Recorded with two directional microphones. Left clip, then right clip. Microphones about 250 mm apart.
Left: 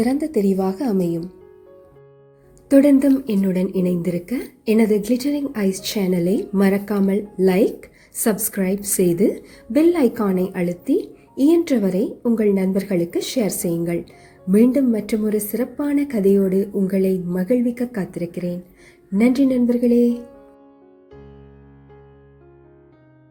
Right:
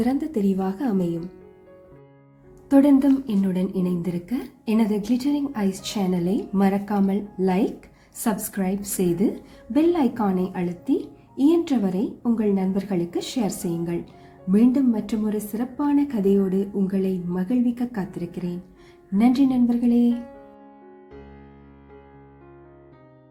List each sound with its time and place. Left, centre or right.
0.0 s speech: centre
2.6 s speech: centre